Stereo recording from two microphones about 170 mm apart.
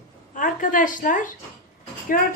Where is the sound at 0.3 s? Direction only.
55° left (ahead or behind).